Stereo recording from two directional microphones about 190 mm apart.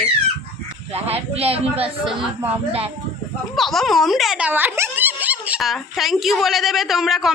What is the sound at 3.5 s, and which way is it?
Speech, centre (ahead or behind).